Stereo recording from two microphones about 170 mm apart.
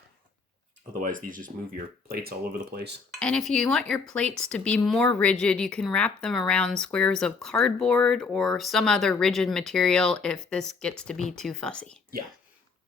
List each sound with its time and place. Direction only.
1.0 s speech: 50° right (ahead or behind)
2.0 s speech: 65° right (ahead or behind)
3.2 s speech: 5° left (ahead or behind)